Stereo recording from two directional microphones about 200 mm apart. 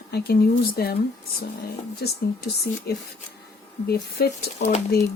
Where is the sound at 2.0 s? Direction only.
55° left (ahead or behind).